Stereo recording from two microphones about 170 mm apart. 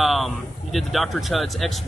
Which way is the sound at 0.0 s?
Centre (ahead or behind).